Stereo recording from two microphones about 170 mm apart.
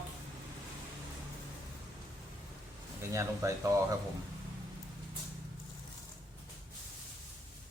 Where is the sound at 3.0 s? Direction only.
15° right (ahead or behind).